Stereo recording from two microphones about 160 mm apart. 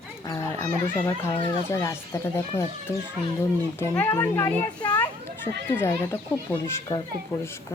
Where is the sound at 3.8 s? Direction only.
15° left (ahead or behind).